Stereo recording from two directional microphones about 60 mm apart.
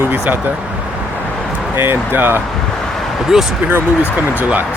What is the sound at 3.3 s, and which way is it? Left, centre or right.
Speech, centre.